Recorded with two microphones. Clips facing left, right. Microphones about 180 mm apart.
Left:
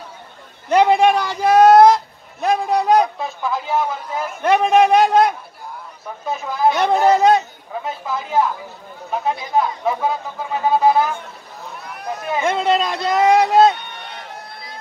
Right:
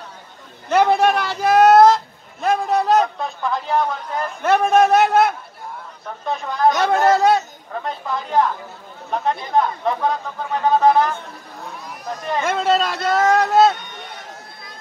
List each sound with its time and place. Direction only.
0.7 s a sound: 10° left (ahead or behind)
2.4 s speech: 10° left (ahead or behind)
6.8 s speech: 15° left (ahead or behind)
7.8 s speech: 5° left (ahead or behind)
13.8 s run: 60° left (ahead or behind)